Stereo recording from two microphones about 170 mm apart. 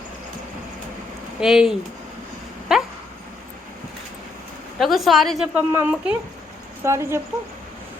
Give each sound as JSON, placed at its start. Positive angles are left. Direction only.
{"t": 1.4, "sound": "a woman's voice", "side_deg": -5}
{"t": 2.7, "sound": "a sound", "side_deg": 0}
{"t": 4.8, "sound": "a woman's voice", "side_deg": 0}